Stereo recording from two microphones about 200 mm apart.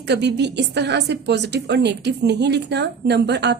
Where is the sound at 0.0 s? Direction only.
60° right (ahead or behind).